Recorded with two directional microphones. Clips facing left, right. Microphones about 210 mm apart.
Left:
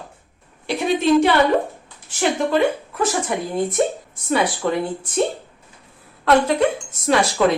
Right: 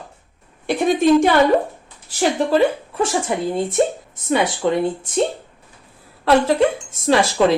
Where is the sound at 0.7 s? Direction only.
50° right (ahead or behind).